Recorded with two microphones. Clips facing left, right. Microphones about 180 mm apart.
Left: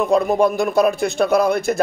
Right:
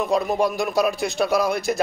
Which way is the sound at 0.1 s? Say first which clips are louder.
Left 6 dB; 50° left (ahead or behind).